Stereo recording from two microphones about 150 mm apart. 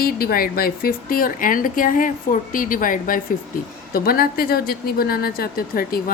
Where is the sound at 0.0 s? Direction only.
85° left; by 3.2 s 65° left (ahead or behind).